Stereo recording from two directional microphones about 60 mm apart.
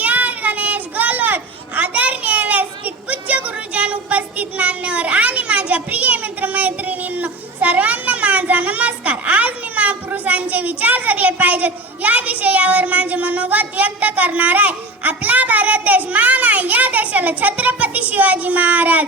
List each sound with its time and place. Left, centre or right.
0.0 s children playing: right